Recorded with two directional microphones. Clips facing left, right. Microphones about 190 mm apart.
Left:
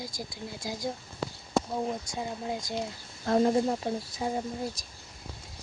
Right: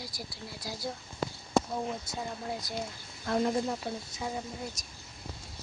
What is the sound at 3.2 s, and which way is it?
Speech, 35° left (ahead or behind).